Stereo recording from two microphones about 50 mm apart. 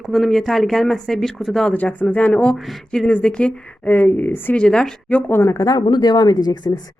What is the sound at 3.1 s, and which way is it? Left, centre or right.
Speech, centre.